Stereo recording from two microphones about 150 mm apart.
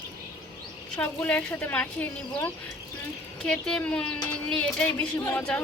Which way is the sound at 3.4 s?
5° left (ahead or behind).